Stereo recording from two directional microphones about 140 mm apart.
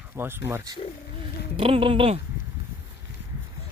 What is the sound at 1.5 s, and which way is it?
Speech, 40° right (ahead or behind).